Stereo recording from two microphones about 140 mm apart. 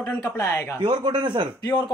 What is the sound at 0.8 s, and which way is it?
Speech, 35° right (ahead or behind).